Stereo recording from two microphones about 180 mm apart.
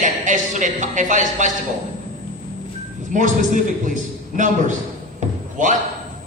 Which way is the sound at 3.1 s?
45° right (ahead or behind).